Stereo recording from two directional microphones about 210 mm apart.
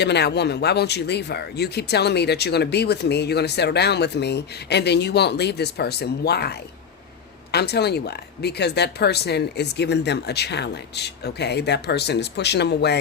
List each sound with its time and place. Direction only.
0.0 s speech: 55° left (ahead or behind)